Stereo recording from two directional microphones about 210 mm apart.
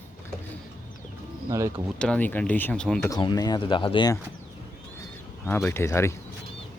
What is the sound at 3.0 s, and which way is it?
Speech, 20° left (ahead or behind).